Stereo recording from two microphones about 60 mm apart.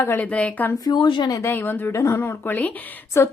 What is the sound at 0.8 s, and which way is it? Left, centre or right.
Speech, left.